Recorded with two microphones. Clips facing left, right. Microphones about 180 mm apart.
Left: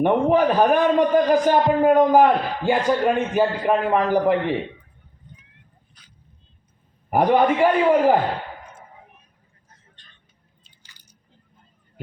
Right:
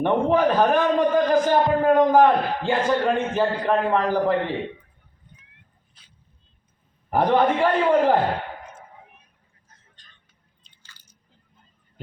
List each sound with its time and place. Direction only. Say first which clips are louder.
0.0 s a man's voice: left 2 dB; 15° left (ahead or behind)
6.0 s dog: left 4 dB; 25° right (ahead or behind)
7.1 s a man's voice: left 2 dB; 10° left (ahead or behind)
10.0 s vehicle: left 2 dB; 40° right (ahead or behind)
10.6 s squish: right 2 dB; 15° left (ahead or behind)